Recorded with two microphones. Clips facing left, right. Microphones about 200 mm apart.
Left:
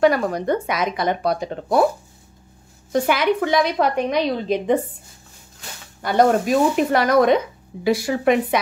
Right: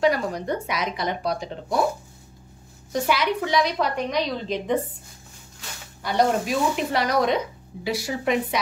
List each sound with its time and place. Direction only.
0.0 s speech: 55° left (ahead or behind)
2.9 s a woman's voice: 55° left (ahead or behind)
6.0 s a woman's voice: 50° left (ahead or behind)